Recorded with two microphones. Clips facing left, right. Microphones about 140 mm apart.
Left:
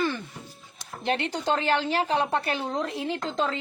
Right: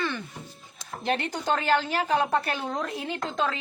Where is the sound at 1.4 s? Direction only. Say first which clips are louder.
Even; 25° left (ahead or behind).